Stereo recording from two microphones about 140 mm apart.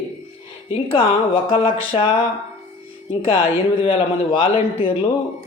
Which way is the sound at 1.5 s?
45° left (ahead or behind).